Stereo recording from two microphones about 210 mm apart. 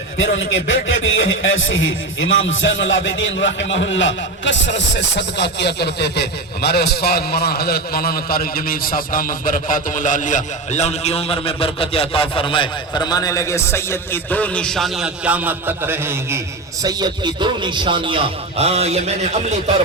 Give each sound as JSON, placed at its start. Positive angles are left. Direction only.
{"t": 0.2, "sound": "a man's voice", "side_deg": 65}